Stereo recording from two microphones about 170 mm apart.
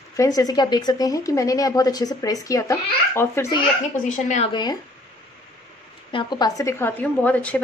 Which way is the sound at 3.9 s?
45° left (ahead or behind).